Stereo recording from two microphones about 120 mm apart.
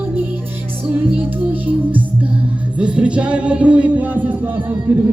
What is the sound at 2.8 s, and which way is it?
Music, 10° right (ahead or behind).